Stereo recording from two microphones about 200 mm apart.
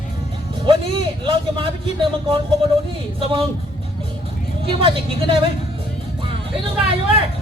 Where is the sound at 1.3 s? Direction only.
25° right (ahead or behind).